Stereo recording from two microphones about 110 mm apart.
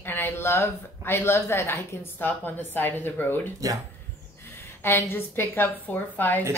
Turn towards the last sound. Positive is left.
turn(degrees=15)  # may be behind; listen again after turning